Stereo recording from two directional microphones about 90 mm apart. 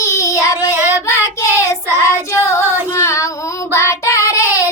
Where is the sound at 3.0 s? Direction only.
35° left (ahead or behind).